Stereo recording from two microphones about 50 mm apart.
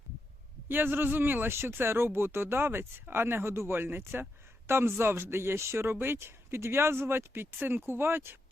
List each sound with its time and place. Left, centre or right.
0.7 s speech: right